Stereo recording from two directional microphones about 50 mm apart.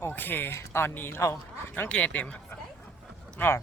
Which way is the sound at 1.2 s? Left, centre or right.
Left.